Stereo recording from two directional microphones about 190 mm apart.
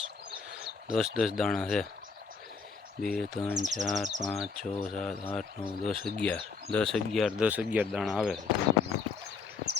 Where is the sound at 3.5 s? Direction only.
40° right (ahead or behind).